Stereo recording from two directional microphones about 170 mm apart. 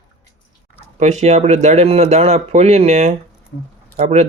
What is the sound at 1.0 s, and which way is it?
Speech, 45° right (ahead or behind).